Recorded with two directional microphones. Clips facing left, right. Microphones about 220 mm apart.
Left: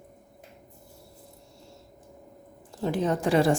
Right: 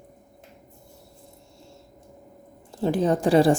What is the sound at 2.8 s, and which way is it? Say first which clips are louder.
Speech: right 4 dB; 30° right (ahead or behind).